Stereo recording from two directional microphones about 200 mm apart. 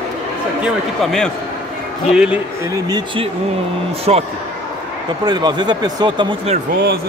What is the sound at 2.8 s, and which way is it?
Speech, 20° right (ahead or behind).